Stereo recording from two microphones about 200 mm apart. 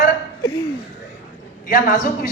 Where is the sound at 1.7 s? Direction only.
40° left (ahead or behind).